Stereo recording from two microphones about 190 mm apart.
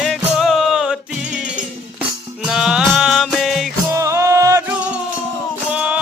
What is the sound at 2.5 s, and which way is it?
Music, 5° right (ahead or behind).